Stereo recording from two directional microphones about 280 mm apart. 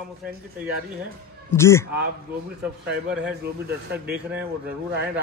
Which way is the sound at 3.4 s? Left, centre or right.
Right.